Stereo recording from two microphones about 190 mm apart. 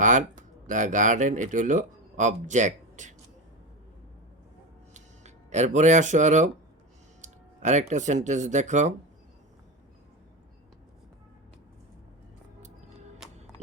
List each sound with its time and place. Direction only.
0.0 s speech: 40° right (ahead or behind)
4.9 s speech: 35° right (ahead or behind)